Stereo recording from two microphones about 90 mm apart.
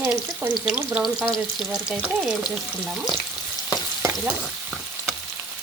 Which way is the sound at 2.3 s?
5° right (ahead or behind).